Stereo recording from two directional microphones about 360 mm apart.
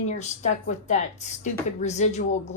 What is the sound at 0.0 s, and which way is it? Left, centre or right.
Speech, centre.